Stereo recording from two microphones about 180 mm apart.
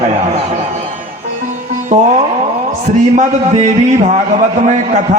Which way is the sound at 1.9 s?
40° right (ahead or behind).